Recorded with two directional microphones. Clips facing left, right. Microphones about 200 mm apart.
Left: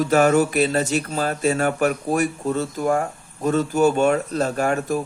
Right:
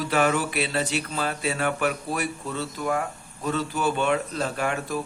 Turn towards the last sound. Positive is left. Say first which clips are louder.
# left 6 dB
turn(degrees=45)  # may be behind; listen again after turning